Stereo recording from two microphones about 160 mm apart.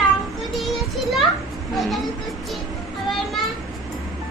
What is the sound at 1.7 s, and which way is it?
Speech, centre (ahead or behind).